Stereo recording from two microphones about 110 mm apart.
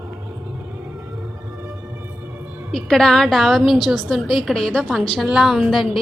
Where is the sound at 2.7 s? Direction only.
5° left (ahead or behind).